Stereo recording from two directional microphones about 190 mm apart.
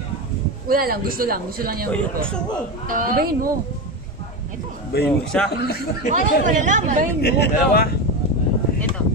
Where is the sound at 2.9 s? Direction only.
45° right (ahead or behind).